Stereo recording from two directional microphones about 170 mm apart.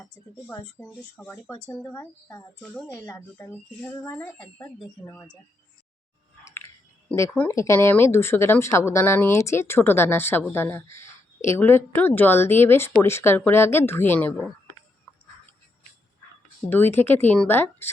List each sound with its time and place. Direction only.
0.5 s speech: 10° left (ahead or behind)
7.2 s speech: 15° left (ahead or behind)
16.6 s speech: 10° left (ahead or behind)